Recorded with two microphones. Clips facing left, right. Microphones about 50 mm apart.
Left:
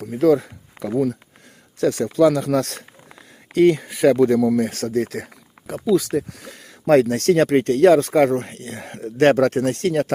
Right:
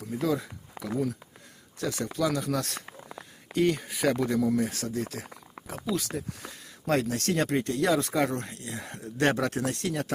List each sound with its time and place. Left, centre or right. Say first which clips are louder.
0.0 s a sound: left 12 dB; left
1.8 s speech: left 12 dB; left
2.1 s speech: left 12 dB; left